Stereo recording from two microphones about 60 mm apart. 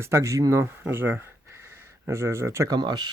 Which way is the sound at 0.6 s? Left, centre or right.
Right.